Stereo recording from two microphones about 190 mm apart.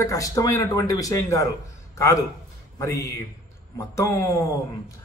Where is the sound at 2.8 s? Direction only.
15° left (ahead or behind).